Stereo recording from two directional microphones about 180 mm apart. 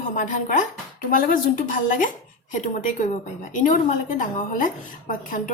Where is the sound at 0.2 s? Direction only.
45° left (ahead or behind).